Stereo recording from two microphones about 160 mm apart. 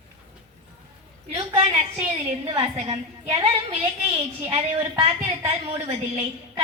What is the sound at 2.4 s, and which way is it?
A woman's voice, 35° right (ahead or behind).